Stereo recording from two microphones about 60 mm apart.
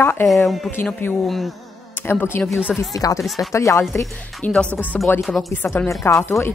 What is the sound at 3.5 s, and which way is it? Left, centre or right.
Speech, left.